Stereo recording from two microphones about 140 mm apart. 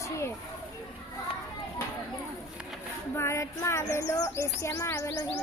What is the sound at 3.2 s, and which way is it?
Bird, 20° left (ahead or behind).